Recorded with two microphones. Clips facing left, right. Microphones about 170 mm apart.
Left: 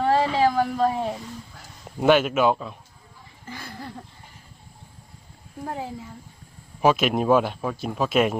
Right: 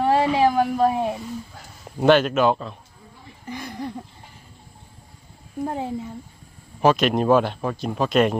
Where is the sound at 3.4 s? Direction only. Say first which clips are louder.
Right 6 dB; 20° right (ahead or behind).